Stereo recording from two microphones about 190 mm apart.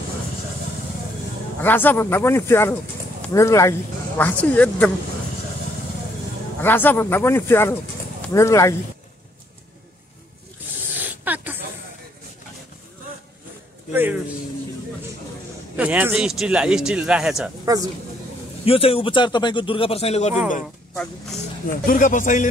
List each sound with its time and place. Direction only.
1.6 s speech: 10° left (ahead or behind)
6.6 s speech: 10° left (ahead or behind)
10.8 s spray: 10° right (ahead or behind)
13.9 s speech: 10° right (ahead or behind)
15.7 s speech: 10° right (ahead or behind)
17.7 s speech: 20° right (ahead or behind)
18.7 s speech: 30° left (ahead or behind)
20.9 s speech: centre (ahead or behind)
21.6 s speech: 45° left (ahead or behind)